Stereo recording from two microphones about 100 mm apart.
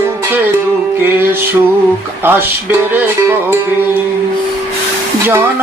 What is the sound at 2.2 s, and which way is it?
Music, 20° right (ahead or behind).